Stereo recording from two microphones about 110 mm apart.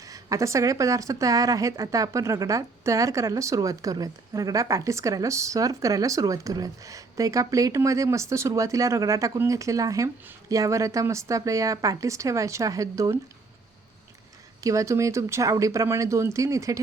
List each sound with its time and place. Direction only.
0.0 s a woman's voice: 30° right (ahead or behind)
14.6 s a woman's voice: 30° right (ahead or behind)